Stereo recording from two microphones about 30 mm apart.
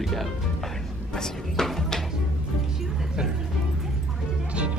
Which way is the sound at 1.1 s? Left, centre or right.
Centre.